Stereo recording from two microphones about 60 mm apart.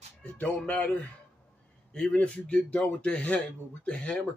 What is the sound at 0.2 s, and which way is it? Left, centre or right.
Speech, left.